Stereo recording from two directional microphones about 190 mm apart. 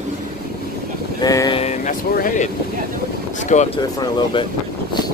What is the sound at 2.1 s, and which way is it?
Speech, 45° left (ahead or behind).